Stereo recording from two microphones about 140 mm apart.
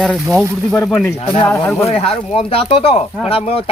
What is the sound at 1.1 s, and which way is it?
Speech, 45° left (ahead or behind).